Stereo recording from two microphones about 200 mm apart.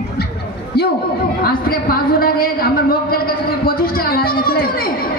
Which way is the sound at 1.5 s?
45° left (ahead or behind).